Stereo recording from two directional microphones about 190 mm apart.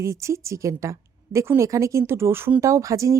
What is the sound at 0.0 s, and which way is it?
A woman's voice, 15° right (ahead or behind).